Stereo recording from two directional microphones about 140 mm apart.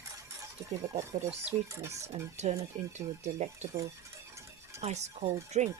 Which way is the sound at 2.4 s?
55° right (ahead or behind).